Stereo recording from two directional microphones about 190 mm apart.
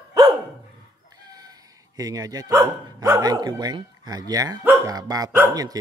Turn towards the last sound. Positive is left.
turn(degrees=-20)  # may be behind; listen again after turning